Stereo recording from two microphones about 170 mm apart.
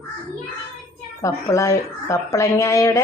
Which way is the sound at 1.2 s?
20° left (ahead or behind).